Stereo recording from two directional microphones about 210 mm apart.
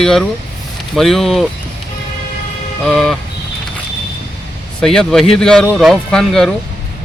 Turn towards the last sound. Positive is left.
turn(degrees=5)  # may be behind; listen again after turning